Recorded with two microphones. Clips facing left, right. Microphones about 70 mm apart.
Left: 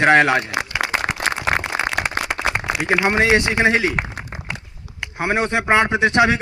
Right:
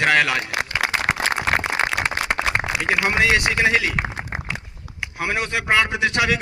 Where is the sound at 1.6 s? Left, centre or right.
Centre.